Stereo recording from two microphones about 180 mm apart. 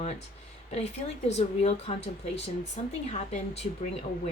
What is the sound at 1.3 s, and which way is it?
Speech, 35° left (ahead or behind).